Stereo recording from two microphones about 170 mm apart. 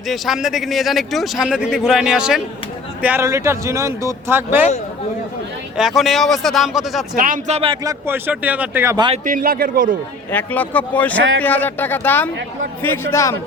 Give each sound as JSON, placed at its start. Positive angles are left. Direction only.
{"t": 0.1, "sound": "a man's voice", "side_deg": 0}
{"t": 5.7, "sound": "a man's voice", "side_deg": 0}
{"t": 7.2, "sound": "speech", "side_deg": -50}
{"t": 7.9, "sound": "speech", "side_deg": -15}
{"t": 9.2, "sound": "a man's voice", "side_deg": -55}
{"t": 10.3, "sound": "speech", "side_deg": 10}